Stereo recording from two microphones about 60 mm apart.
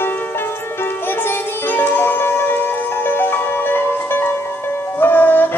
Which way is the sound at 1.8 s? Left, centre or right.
Left.